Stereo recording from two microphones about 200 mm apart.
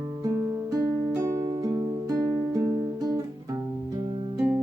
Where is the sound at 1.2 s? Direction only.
15° right (ahead or behind).